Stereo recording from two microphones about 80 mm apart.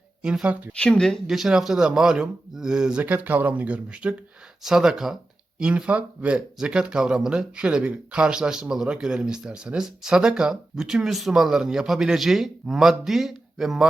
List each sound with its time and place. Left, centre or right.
0.2 s speech: centre
0.7 s speech: centre
1.3 s speech: centre